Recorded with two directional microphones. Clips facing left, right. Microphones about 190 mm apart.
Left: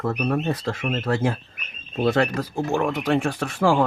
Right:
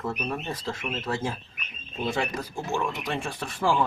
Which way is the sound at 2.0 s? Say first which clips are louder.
Left 8 dB; 70° left (ahead or behind).